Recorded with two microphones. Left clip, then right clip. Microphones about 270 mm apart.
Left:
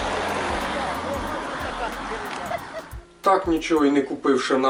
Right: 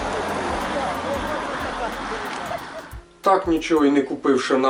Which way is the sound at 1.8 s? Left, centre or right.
Centre.